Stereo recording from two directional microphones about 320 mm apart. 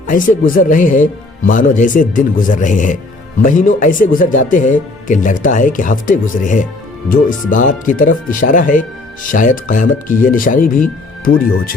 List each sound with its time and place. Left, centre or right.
0.1 s speech: left